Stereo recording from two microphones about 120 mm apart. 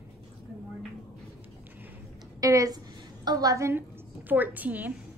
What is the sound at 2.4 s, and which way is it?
A woman's voice, 30° right (ahead or behind).